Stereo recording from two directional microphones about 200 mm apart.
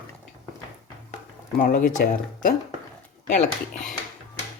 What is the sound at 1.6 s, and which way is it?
Speech, 45° left (ahead or behind).